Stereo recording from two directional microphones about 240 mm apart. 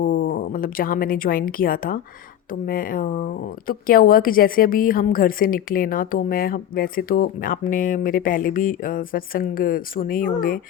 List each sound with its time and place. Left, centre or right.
0.0 s a woman's voice: left